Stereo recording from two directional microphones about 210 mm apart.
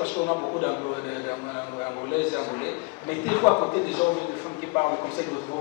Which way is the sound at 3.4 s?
25° left (ahead or behind).